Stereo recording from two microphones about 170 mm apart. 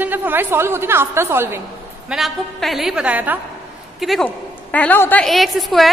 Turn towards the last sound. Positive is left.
turn(degrees=0)  # may be behind; listen again after turning